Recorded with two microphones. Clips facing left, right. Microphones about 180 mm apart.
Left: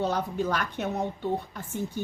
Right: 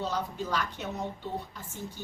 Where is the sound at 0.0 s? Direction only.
55° left (ahead or behind).